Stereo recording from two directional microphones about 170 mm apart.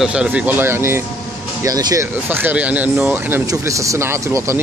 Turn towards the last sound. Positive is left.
turn(degrees=-15)  # may be behind; listen again after turning